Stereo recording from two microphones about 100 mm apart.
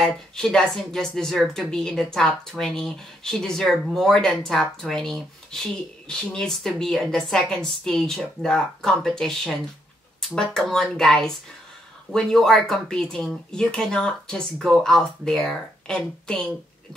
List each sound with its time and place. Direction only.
0.0 s speech: 5° left (ahead or behind)